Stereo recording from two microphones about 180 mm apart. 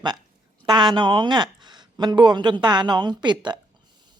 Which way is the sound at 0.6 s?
25° right (ahead or behind).